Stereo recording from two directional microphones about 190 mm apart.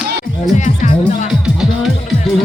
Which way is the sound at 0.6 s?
40° left (ahead or behind).